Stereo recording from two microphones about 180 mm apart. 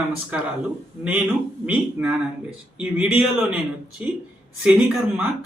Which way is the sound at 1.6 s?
5° right (ahead or behind).